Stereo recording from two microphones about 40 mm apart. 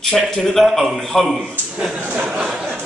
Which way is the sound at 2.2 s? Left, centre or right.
Right.